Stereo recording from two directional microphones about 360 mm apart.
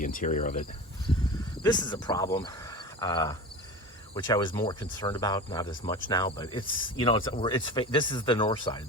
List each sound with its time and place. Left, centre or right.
0.0 s cricket: left
1.6 s speech: centre